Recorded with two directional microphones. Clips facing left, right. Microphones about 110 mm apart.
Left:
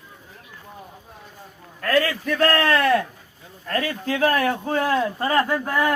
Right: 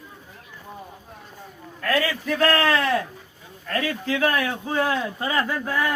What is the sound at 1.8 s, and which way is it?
A man's voice, 45° left (ahead or behind).